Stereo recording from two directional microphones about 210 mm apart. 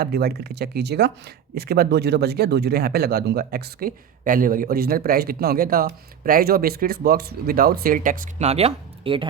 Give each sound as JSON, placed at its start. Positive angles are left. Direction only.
{"t": 0.0, "sound": "speech", "side_deg": -50}